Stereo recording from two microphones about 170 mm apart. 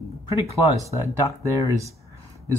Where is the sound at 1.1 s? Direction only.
20° right (ahead or behind).